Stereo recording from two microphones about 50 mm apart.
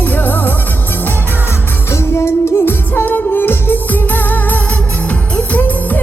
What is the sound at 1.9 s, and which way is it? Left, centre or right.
Music, left.